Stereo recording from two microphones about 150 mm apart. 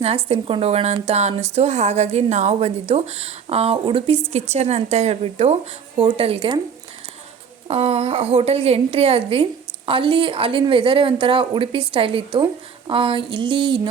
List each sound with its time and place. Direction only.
0.0 s a woman's voice: 40° right (ahead or behind)
7.7 s a woman's voice: 45° right (ahead or behind)